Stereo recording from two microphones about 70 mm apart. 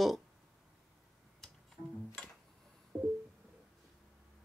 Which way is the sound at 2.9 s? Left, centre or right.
Right.